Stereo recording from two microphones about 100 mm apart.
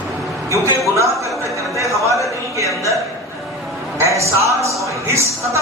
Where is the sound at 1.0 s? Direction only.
30° right (ahead or behind).